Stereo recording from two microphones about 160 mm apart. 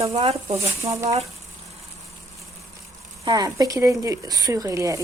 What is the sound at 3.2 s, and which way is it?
Speech, 25° right (ahead or behind).